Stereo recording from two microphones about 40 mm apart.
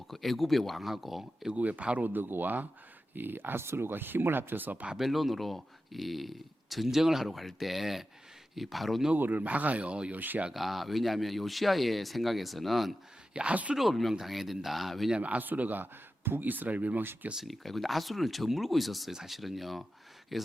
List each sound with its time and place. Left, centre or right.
0.1 s speech: centre
1.5 s speech: right
2.0 s speech: right
4.9 s speech: centre
9.1 s speech: right
10.2 s speech: right
10.5 s speech: centre
13.3 s speech: right
13.7 s speech: centre
15.2 s speech: right
17.3 s speech: centre